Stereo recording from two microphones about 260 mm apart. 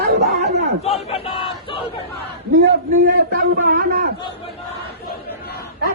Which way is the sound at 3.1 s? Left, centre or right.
Right.